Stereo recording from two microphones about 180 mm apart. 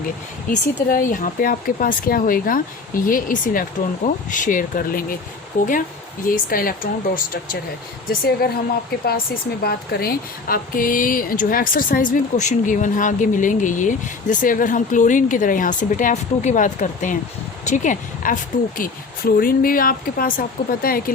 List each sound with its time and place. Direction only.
0.5 s speech: 50° left (ahead or behind)
8.1 s speech: 55° left (ahead or behind)